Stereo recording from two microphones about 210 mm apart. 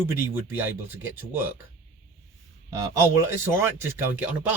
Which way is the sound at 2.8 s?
15° right (ahead or behind).